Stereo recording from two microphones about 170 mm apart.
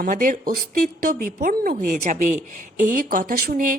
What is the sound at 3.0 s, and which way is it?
Speech, 55° right (ahead or behind).